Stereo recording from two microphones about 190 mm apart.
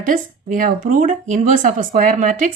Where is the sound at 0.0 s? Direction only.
45° right (ahead or behind).